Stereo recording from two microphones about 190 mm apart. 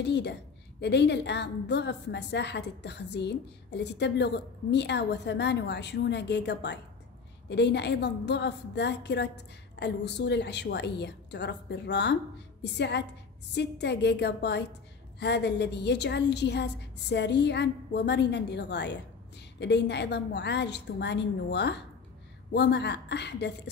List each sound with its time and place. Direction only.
0.0 s a woman's voice: 65° left (ahead or behind)